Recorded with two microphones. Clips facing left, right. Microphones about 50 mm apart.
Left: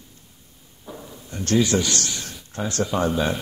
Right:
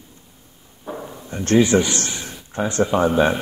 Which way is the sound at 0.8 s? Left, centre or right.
Right.